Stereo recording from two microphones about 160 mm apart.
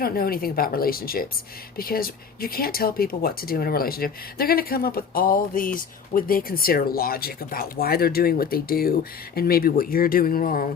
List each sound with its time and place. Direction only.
0.0 s speech: 70° left (ahead or behind)